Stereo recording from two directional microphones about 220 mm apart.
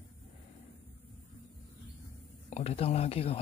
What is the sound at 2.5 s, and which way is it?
Speech, 30° left (ahead or behind).